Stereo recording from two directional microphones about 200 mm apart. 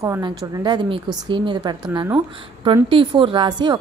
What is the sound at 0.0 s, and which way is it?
A woman's voice, 20° right (ahead or behind).